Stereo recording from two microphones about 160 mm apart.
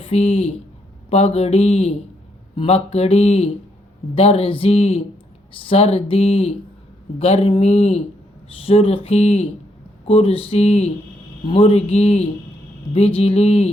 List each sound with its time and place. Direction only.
0.0 s speech: 40° left (ahead or behind)